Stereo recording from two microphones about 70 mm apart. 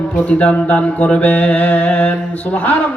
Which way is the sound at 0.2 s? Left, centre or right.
Centre.